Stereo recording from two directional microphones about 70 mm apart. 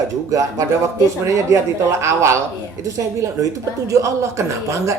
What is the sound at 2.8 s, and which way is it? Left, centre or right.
Speech, right.